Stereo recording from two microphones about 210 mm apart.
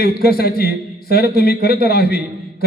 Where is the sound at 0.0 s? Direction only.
50° left (ahead or behind).